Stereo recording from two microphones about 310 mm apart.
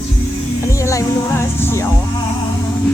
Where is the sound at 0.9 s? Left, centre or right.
Centre.